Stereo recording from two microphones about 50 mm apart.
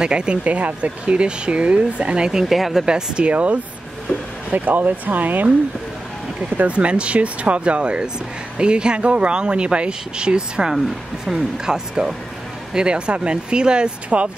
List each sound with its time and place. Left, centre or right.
0.0 s speech: centre
2.4 s speech: centre
2.8 s speech: centre; by 5.5 s right
6.5 s speech: right
10.7 s speech: centre; by 14.3 s right